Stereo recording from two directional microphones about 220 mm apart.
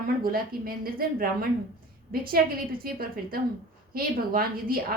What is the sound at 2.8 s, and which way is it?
A woman's voice, 40° right (ahead or behind).